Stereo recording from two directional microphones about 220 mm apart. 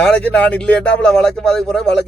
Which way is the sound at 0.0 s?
5° left (ahead or behind).